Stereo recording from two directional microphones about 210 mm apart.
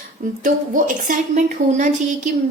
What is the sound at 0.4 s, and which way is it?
A woman's voice, 40° right (ahead or behind).